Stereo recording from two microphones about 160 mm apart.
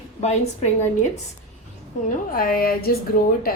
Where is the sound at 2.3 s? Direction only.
65° left (ahead or behind).